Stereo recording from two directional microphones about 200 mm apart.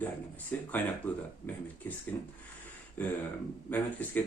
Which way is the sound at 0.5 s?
10° left (ahead or behind).